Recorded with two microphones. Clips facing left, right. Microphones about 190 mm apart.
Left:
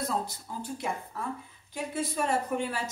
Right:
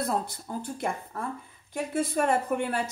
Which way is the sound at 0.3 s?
55° right (ahead or behind).